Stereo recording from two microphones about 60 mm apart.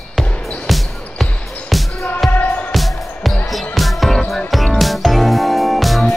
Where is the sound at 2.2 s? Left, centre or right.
Left.